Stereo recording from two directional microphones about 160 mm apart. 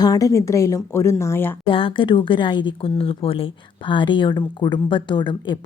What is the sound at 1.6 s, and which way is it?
A woman's voice, 35° left (ahead or behind).